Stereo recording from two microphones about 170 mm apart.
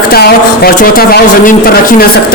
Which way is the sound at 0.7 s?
55° left (ahead or behind).